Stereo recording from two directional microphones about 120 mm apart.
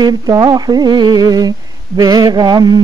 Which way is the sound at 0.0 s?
35° right (ahead or behind).